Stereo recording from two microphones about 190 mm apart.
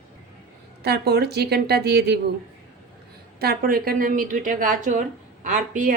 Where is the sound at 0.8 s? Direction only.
60° right (ahead or behind).